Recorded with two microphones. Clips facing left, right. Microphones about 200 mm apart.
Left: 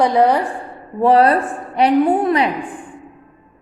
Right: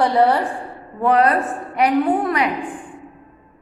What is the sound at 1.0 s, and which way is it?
A woman's voice, 30° left (ahead or behind).